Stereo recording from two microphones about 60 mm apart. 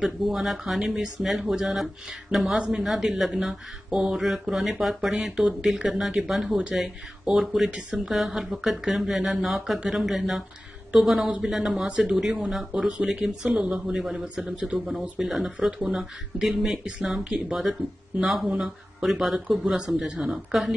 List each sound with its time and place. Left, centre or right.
0.0 s speech: centre
2.5 s speech: centre
2.9 s a woman's voice: centre; by 13.0 s right
13.0 s speech: centre
19.0 s speech: centre